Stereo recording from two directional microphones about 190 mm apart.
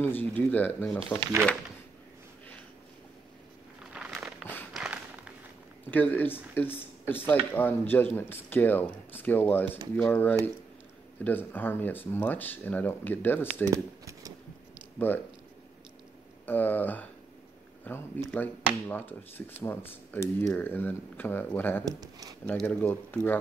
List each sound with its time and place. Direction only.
0.0 s speech: 10° left (ahead or behind)
3.9 s a sound: 5° right (ahead or behind)
5.9 s speech: 10° left (ahead or behind)
13.7 s shuffling cards: 15° right (ahead or behind)
15.0 s speech: 10° left (ahead or behind)
16.4 s speech: 10° left (ahead or behind)
21.8 s speech: 20° right (ahead or behind)
22.4 s speech: 10° left (ahead or behind)